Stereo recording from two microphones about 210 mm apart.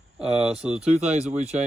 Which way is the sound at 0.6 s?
5° right (ahead or behind).